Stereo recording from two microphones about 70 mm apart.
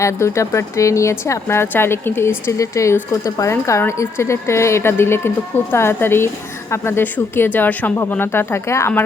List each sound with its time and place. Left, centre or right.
0.0 s a woman's voice: left
2.5 s speech: left
3.5 s a woman's voice: left
8.2 s a woman's voice: left